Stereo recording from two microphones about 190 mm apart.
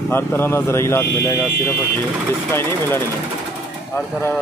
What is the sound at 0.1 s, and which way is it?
Speech, 10° left (ahead or behind).